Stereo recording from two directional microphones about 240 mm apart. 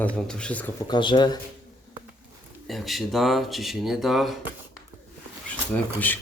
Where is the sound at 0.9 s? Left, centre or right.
Centre.